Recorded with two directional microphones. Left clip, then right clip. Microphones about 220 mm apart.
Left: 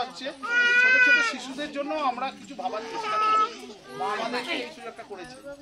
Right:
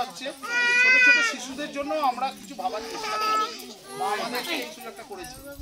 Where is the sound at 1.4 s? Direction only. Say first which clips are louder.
Even; 10° left (ahead or behind).